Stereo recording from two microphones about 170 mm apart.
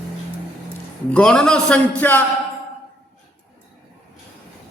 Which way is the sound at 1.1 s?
5° left (ahead or behind).